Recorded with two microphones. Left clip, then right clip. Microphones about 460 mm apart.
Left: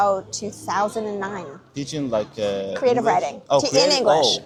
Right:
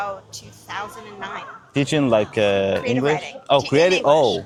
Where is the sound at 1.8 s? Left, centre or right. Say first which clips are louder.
Right 6 dB; right.